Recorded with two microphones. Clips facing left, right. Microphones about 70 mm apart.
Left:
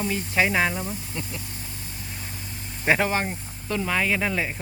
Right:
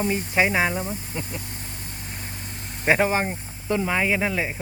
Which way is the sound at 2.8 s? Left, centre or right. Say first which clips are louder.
Right 2 dB; centre.